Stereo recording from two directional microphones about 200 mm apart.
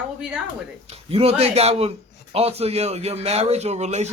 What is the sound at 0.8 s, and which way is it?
A man's voice, 30° right (ahead or behind).